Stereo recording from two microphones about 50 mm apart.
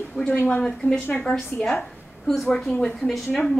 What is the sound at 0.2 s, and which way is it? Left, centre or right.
Speech, left.